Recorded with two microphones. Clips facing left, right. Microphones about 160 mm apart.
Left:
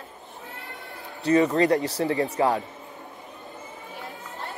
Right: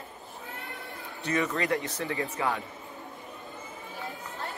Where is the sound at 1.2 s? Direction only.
35° left (ahead or behind).